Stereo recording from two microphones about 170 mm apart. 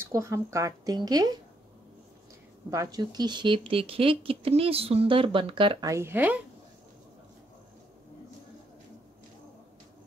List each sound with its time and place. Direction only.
0.0 s a woman's voice: 15° right (ahead or behind)
2.7 s speech: 20° right (ahead or behind)